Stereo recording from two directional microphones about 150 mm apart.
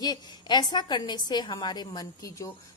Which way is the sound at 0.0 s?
25° left (ahead or behind).